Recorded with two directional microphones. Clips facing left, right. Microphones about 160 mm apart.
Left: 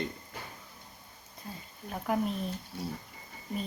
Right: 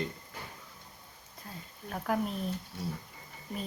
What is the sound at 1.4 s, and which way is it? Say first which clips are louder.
Speech: left 1 dB; centre (ahead or behind).